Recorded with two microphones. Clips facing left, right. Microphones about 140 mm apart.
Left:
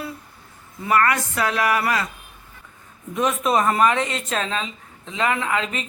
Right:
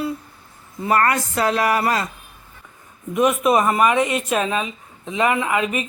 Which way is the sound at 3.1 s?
10° right (ahead or behind).